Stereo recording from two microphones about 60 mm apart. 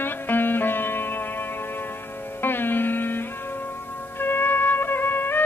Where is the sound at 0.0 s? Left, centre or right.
Left.